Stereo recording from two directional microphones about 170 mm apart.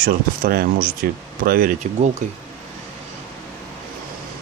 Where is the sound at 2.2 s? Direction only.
45° right (ahead or behind).